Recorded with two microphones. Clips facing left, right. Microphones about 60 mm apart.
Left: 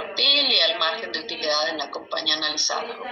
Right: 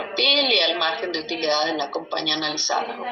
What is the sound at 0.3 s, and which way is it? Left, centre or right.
A woman's voice, right.